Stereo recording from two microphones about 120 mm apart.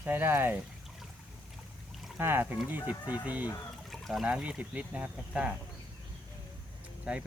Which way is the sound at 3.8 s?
Centre (ahead or behind).